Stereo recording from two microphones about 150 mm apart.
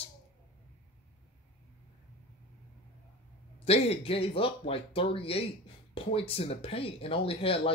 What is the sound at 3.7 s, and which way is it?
Speech, 40° left (ahead or behind).